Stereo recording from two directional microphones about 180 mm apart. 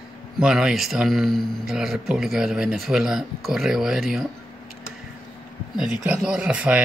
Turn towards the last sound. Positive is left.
turn(degrees=-5)  # may be behind; listen again after turning